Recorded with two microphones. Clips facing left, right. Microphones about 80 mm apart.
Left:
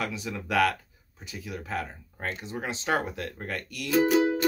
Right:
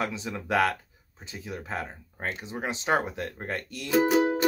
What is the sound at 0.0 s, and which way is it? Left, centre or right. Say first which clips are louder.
Speech: right 1 dB; right.